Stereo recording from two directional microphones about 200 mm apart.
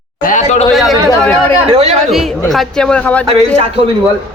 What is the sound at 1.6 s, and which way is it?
Speech, 30° right (ahead or behind).